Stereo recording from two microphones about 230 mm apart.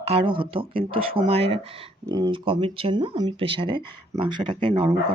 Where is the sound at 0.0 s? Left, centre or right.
Right.